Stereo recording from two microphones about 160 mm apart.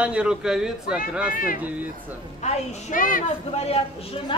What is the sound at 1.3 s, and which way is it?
A child's voice, 60° left (ahead or behind).